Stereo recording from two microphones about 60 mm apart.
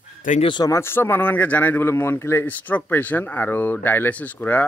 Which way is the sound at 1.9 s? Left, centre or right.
Left.